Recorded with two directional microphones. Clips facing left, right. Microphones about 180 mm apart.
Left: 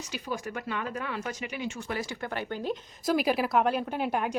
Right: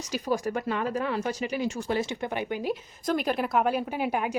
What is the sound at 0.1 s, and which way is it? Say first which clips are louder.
A woman's voice: right 8 dB; 40° right (ahead or behind).